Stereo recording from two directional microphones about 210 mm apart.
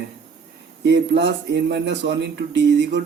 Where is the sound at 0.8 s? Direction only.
55° right (ahead or behind).